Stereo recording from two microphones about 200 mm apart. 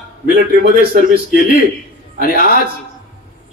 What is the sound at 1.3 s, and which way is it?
A man's voice, 45° left (ahead or behind).